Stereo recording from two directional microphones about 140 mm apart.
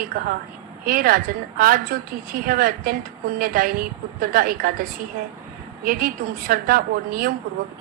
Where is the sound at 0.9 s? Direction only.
90° right.